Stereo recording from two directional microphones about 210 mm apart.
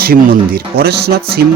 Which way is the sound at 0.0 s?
45° right (ahead or behind).